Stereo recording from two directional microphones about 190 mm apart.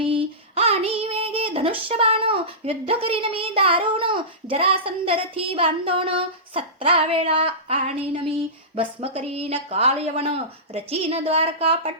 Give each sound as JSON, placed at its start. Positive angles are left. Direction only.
{"t": 0.0, "sound": "female singing", "side_deg": -30}
{"t": 8.7, "sound": "a woman's voice", "side_deg": -30}